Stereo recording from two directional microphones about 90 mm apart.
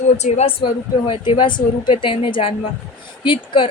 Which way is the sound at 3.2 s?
70° left (ahead or behind).